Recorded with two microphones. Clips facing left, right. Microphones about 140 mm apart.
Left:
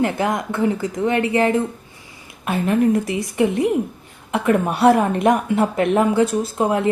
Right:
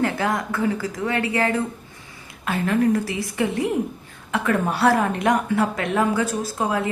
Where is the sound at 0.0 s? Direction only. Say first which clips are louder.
Left 2 dB; 20° left (ahead or behind).